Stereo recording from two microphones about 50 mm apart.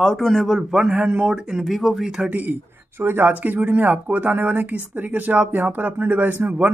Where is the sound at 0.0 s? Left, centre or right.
Centre.